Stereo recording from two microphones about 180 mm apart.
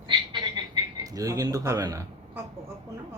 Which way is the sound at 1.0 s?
20° right (ahead or behind).